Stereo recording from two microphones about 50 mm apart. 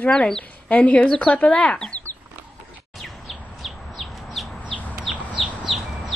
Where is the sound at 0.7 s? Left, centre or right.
Left.